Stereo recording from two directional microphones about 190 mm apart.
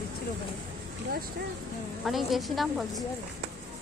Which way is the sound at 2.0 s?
Centre (ahead or behind).